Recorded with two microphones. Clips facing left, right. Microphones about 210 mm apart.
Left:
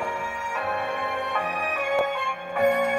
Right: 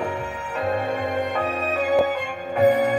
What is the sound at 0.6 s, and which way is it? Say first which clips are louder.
Music: right 6 dB; 40° right (ahead or behind).